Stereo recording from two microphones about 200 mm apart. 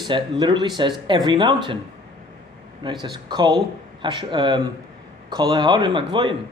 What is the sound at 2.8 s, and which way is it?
Speech, 20° right (ahead or behind).